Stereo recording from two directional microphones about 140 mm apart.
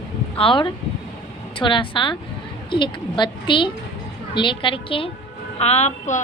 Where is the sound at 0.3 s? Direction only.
40° left (ahead or behind).